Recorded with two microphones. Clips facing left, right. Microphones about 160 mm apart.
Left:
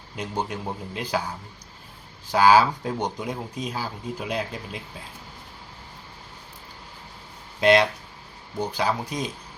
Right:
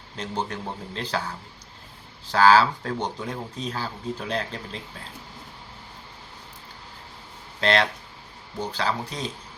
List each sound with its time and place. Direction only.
0.2 s speech: 15° left (ahead or behind)
2.3 s speech: 15° left (ahead or behind)
7.6 s speech: 15° left (ahead or behind)